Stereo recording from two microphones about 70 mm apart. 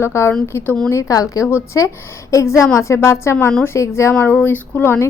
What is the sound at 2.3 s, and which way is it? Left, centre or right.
A woman's voice, left.